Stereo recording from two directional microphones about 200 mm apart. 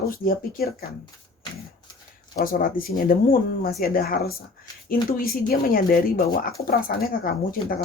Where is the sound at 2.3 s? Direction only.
45° left (ahead or behind).